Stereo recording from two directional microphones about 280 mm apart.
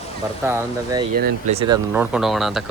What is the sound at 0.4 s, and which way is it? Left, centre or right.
Speech, centre.